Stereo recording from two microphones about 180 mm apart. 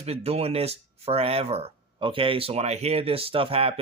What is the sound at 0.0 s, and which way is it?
Speech, 35° right (ahead or behind).